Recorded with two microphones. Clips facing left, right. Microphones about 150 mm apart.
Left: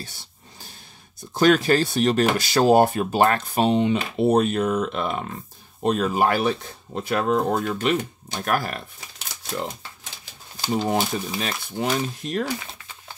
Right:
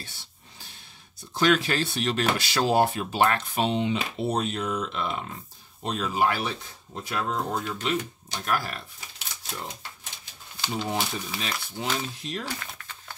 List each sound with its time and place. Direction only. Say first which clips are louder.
1.3 s speech: left 6 dB; 45° left (ahead or behind)
10.6 s speech: left 6 dB; 40° left (ahead or behind)
12.5 s speech: left 4 dB; 10° left (ahead or behind)